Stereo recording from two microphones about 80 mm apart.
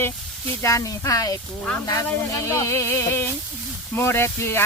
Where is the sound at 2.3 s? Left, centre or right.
Left.